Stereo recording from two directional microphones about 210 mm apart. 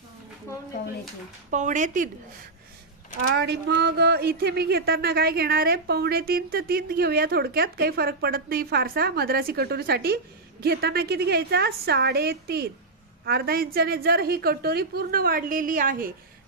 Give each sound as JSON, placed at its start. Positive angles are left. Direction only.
{"t": 1.5, "sound": "speech", "side_deg": -35}
{"t": 3.3, "sound": "speech", "side_deg": -50}